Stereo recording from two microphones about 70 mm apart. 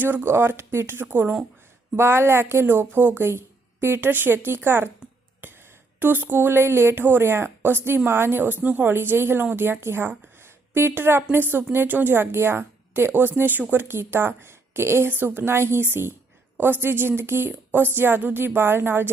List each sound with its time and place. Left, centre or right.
0.0 s a woman's voice: right
6.0 s a woman's voice: right